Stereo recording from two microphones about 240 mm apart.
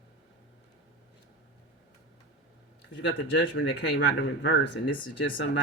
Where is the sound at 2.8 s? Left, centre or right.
Left.